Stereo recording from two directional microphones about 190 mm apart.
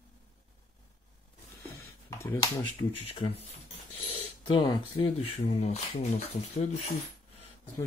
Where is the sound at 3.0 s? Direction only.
30° left (ahead or behind).